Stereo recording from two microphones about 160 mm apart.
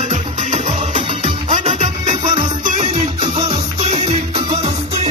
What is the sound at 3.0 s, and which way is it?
Music, 30° right (ahead or behind).